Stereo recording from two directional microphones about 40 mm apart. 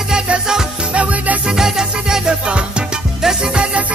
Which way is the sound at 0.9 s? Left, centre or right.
Right.